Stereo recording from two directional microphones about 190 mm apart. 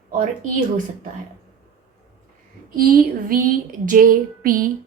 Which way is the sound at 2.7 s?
50° right (ahead or behind).